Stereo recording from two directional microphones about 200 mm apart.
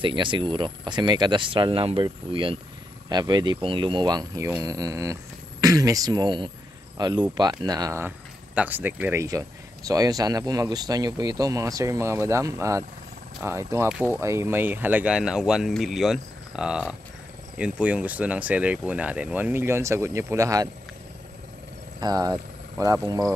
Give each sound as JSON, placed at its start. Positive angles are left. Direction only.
{"t": 0.0, "sound": "speech", "side_deg": -25}
{"t": 22.0, "sound": "speech", "side_deg": -20}